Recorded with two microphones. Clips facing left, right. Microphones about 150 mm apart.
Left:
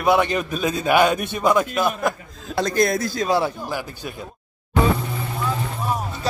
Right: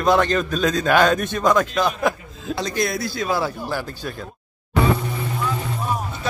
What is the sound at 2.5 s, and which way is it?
Speech, 50° left (ahead or behind).